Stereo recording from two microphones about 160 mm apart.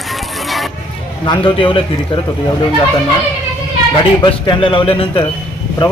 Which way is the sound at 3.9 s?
35° left (ahead or behind).